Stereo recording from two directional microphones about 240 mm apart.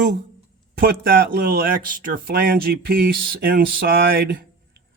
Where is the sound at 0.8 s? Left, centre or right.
Right.